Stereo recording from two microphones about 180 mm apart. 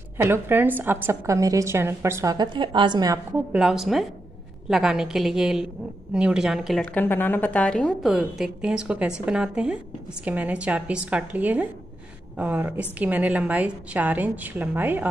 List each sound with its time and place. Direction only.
0.2 s a woman's voice: 10° right (ahead or behind)
3.5 s a woman's voice: 5° right (ahead or behind)
6.8 s a woman's voice: 10° left (ahead or behind); by 15.0 s 10° right (ahead or behind)